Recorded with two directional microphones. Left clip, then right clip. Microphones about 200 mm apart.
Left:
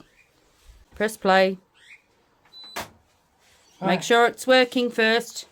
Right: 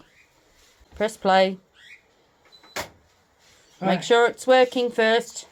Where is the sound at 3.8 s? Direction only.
20° left (ahead or behind).